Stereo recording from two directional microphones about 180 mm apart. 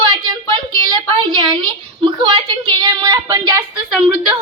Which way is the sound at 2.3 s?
25° right (ahead or behind).